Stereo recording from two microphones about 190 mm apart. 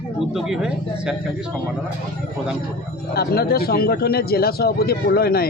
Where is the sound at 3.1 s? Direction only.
55° left (ahead or behind).